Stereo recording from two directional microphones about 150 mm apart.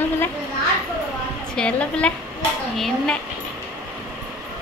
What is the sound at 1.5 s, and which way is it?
Speech, 5° left (ahead or behind).